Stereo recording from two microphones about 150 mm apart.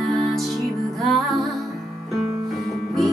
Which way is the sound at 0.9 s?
Centre (ahead or behind).